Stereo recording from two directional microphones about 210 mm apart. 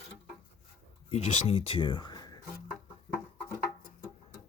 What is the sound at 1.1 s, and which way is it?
Speech, 30° left (ahead or behind).